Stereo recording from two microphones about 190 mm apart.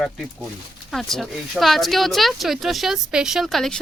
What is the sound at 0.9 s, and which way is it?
Speech, centre (ahead or behind).